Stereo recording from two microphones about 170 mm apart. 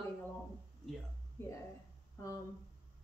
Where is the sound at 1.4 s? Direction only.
15° left (ahead or behind).